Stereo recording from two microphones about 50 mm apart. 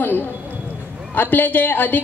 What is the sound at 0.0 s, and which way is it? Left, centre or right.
A woman's voice, left.